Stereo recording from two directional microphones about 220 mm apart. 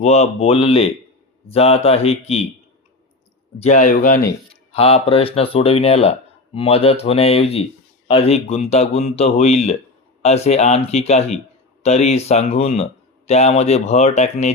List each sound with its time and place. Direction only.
0.0 s speech: 30° left (ahead or behind)
3.6 s speech: 35° left (ahead or behind)
4.7 s speech: 25° left (ahead or behind)